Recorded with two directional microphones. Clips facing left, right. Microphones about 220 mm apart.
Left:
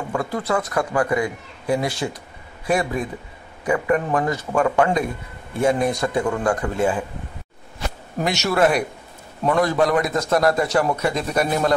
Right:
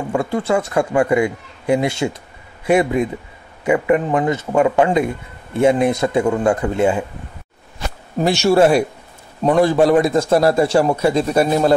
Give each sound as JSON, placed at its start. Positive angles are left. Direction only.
{"t": 0.1, "sound": "a man's voice", "side_deg": -25}
{"t": 8.2, "sound": "a man's voice", "side_deg": -30}